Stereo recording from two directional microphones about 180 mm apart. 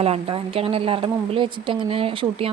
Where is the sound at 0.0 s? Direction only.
35° right (ahead or behind).